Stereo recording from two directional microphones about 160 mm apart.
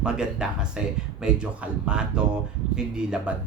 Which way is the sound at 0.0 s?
5° right (ahead or behind).